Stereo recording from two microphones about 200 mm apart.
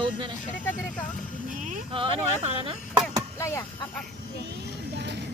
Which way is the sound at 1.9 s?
25° right (ahead or behind).